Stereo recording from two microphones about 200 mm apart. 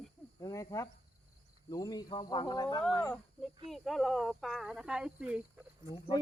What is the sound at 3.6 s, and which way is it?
Speech, centre (ahead or behind).